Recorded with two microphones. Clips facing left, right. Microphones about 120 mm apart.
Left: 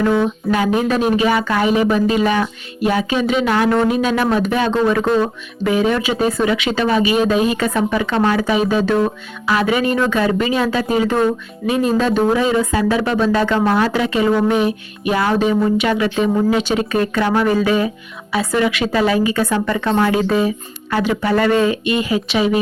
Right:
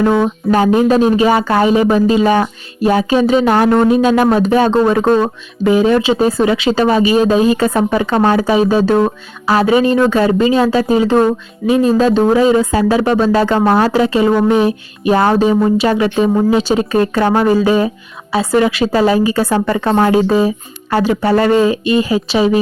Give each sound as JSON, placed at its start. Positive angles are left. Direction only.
{"t": 0.0, "sound": "speech", "side_deg": -40}